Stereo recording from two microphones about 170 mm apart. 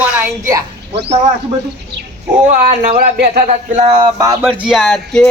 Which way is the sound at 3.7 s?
40° right (ahead or behind).